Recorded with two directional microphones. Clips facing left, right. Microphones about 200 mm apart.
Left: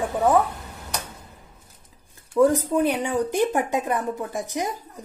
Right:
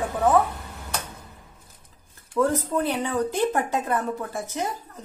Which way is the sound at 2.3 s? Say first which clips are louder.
Left 4 dB; 15° left (ahead or behind).